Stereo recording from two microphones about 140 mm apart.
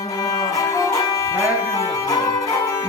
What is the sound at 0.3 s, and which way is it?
Music, 25° left (ahead or behind).